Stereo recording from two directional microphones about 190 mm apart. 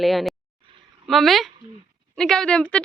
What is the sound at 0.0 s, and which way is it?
Speech, centre (ahead or behind).